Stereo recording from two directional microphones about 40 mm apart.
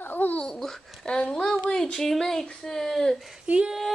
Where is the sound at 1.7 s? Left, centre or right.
Centre.